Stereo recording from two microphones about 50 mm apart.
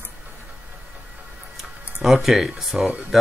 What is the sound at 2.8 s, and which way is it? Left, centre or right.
Speech, right.